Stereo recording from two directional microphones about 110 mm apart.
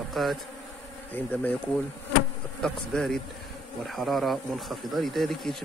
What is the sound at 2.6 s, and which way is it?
Speech, 5° left (ahead or behind).